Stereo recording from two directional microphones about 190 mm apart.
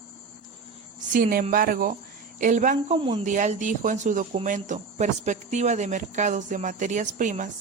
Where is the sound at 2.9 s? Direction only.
30° right (ahead or behind).